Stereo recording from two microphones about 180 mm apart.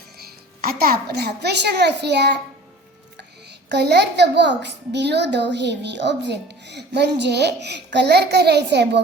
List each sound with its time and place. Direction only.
0.2 s a child's voice: 55° right (ahead or behind)
3.7 s a child's voice: 70° right (ahead or behind)